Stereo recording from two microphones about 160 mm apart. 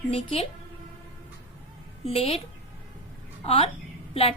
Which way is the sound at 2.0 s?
35° left (ahead or behind).